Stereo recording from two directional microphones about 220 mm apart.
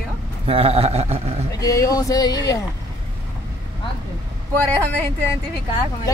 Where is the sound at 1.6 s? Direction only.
15° left (ahead or behind).